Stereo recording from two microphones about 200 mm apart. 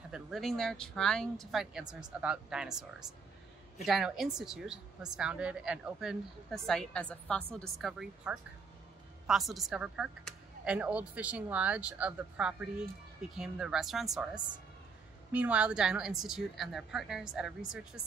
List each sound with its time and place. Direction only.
0.1 s a woman's voice: centre (ahead or behind)